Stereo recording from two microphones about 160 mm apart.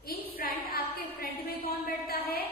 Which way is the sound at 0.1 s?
70° left (ahead or behind).